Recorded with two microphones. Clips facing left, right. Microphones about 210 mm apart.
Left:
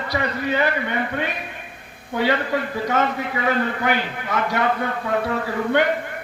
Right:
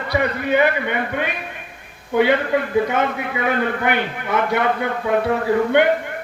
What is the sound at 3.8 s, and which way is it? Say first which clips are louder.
Speech: right 2 dB; 60° right (ahead or behind).